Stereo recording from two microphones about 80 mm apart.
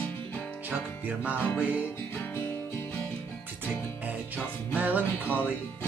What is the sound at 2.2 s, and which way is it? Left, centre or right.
Music, left.